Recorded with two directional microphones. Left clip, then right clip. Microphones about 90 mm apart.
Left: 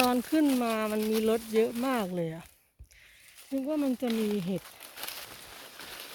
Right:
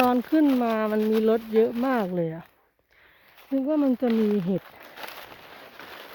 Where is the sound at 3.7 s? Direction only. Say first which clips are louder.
Right 7 dB; 50° right (ahead or behind).